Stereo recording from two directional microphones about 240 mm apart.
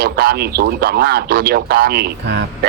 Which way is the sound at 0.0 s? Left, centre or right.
Right.